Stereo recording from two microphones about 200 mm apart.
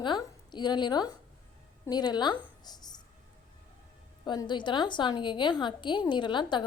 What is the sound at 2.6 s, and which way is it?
Music, 20° left (ahead or behind).